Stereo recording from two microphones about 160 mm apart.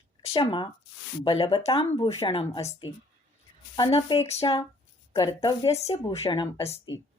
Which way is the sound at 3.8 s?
30° left (ahead or behind).